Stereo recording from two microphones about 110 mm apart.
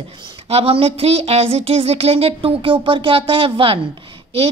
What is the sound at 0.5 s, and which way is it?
A woman's voice, 65° right (ahead or behind).